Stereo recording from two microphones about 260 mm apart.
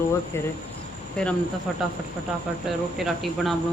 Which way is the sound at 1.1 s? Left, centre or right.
Centre.